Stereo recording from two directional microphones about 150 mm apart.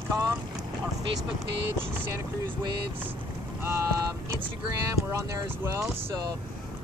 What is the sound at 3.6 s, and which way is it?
Speech, 15° right (ahead or behind).